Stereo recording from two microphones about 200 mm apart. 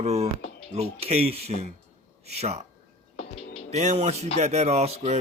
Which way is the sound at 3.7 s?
35° right (ahead or behind).